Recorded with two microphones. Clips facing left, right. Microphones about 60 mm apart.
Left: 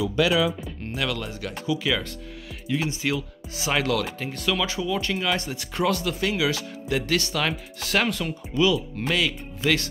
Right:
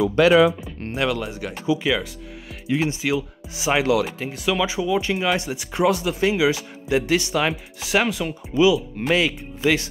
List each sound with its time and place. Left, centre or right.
0.0 s speech: right
0.9 s speech: right
3.0 s speech: centre